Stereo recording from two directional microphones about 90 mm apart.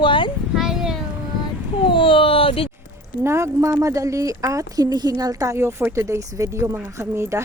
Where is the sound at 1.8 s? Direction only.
75° left (ahead or behind); by 2.7 s 90° left.